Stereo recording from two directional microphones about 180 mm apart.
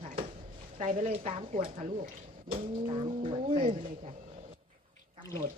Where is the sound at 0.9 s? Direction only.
40° right (ahead or behind).